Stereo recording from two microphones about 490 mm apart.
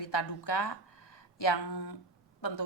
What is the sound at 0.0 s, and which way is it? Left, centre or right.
A woman's voice, left.